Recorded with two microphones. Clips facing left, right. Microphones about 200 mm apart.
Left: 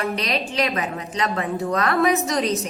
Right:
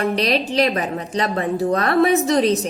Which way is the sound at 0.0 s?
35° right (ahead or behind).